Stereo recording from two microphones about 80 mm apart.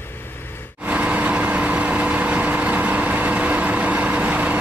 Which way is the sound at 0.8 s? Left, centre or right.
Centre.